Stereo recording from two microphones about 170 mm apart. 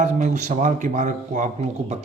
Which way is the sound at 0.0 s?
45° right (ahead or behind).